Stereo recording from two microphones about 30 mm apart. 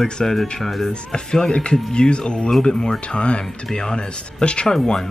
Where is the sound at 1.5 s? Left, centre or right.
Left.